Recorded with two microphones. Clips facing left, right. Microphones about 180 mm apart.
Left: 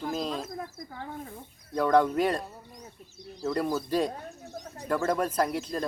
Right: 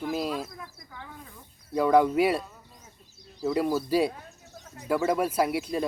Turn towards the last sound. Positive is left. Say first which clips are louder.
# right 2 dB
turn(degrees=-10)  # may be behind; listen again after turning